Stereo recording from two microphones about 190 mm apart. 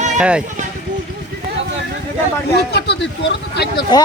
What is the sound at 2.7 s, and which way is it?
Speech, 60° left (ahead or behind).